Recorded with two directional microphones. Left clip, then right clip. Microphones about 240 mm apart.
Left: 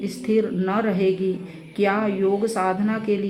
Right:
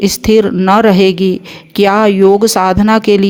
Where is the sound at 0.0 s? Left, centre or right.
Right.